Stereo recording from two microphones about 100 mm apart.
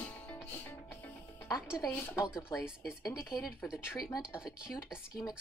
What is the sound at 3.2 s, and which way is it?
Speech, 5° right (ahead or behind).